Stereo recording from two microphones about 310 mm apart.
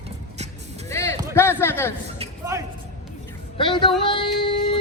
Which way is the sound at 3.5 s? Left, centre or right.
Centre.